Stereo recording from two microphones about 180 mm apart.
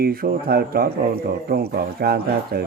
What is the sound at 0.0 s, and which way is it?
Speech, 55° right (ahead or behind).